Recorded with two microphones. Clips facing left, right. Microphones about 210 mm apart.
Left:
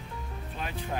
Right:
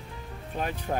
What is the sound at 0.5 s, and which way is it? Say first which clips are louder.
Speech: right 5 dB; 45° right (ahead or behind).